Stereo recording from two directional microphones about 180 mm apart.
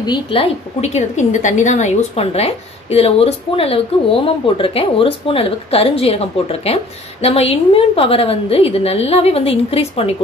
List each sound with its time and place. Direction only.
0.0 s a woman's voice: 25° left (ahead or behind)